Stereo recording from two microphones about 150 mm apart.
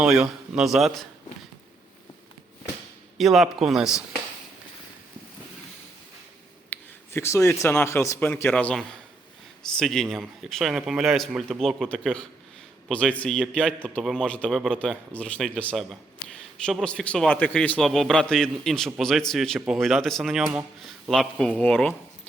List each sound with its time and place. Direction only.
0.0 s speech: 5° right (ahead or behind)
3.2 s speech: centre (ahead or behind)
6.7 s a man's voice: 15° left (ahead or behind)